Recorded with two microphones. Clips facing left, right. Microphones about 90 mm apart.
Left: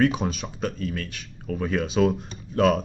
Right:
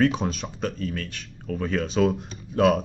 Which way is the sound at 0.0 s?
5° left (ahead or behind).